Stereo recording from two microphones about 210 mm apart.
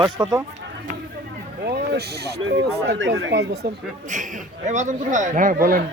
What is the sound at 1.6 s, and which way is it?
Speech, 50° right (ahead or behind).